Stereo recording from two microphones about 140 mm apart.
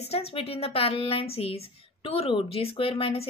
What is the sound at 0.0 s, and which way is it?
A woman's voice, 45° left (ahead or behind).